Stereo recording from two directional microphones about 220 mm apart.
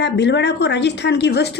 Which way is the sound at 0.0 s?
50° left (ahead or behind).